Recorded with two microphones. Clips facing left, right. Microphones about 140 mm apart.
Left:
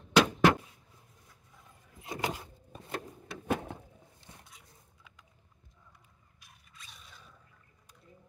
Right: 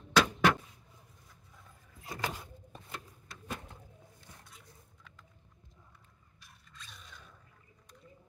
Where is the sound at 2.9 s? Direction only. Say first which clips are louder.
Left 9 dB; 65° left (ahead or behind).